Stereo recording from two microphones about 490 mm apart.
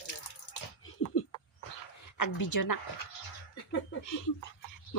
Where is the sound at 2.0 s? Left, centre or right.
Left.